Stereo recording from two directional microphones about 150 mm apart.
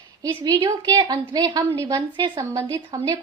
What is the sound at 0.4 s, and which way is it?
A woman's voice, 25° right (ahead or behind).